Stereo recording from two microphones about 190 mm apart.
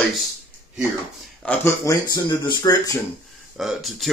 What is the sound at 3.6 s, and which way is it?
Speech, centre (ahead or behind).